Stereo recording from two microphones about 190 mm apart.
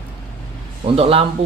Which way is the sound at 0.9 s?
30° right (ahead or behind).